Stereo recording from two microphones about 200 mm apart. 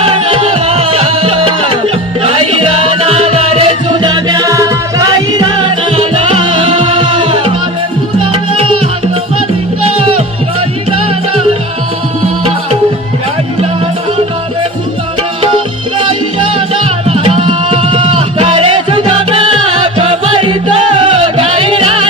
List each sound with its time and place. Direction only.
0.0 s music: 25° right (ahead or behind)
16.0 s music: 25° right (ahead or behind)